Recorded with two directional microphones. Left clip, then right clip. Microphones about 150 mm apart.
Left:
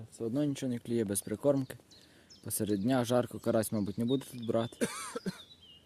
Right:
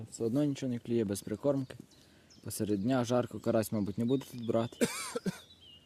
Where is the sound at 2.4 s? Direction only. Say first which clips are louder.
Left 1 dB; 5° left (ahead or behind).